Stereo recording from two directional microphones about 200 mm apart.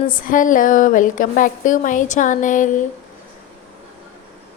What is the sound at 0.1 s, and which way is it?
A woman's voice, 45° left (ahead or behind).